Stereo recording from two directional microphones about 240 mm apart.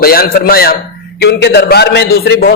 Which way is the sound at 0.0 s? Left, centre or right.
Left.